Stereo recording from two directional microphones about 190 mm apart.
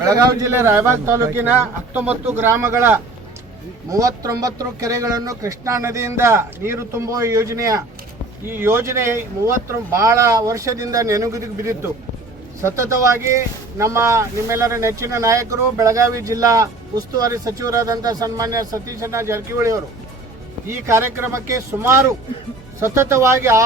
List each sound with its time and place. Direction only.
0.0 s speech: 20° right (ahead or behind)